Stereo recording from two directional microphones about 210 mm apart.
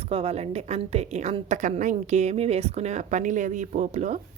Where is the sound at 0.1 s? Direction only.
30° right (ahead or behind).